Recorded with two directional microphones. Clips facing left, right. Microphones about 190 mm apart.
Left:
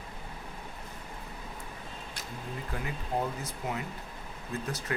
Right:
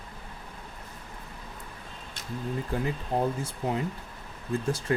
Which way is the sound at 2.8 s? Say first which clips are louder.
Right 3 dB; 30° right (ahead or behind).